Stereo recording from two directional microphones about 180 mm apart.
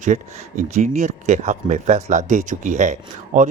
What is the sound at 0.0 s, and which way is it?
Speech, 40° right (ahead or behind).